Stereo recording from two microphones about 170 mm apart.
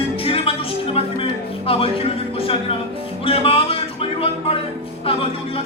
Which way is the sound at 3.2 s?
35° left (ahead or behind).